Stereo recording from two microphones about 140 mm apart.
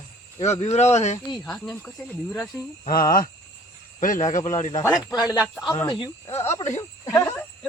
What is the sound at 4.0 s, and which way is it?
Speech, 65° left (ahead or behind).